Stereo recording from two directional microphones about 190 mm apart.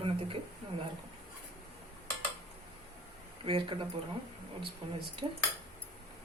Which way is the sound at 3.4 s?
25° right (ahead or behind).